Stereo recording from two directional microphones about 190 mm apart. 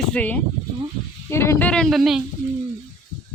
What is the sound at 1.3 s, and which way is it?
Speech, 15° left (ahead or behind).